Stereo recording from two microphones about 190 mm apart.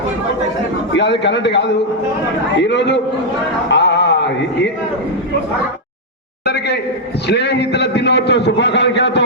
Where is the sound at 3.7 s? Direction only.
70° left (ahead or behind).